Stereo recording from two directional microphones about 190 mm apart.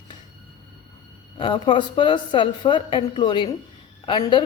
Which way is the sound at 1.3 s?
25° left (ahead or behind).